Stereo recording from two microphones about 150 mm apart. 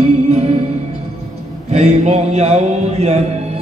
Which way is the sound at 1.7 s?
45° right (ahead or behind).